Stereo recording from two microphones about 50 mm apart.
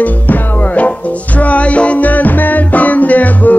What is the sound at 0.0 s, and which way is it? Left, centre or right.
Music, left.